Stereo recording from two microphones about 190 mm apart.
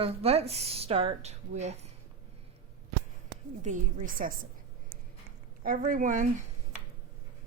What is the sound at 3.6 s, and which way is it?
Speech, 45° right (ahead or behind).